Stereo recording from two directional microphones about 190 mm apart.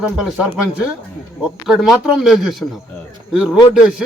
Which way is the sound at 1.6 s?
Centre (ahead or behind).